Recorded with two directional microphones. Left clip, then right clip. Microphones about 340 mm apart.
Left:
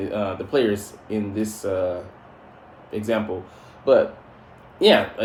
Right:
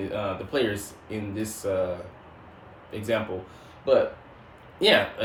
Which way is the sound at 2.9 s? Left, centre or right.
Centre.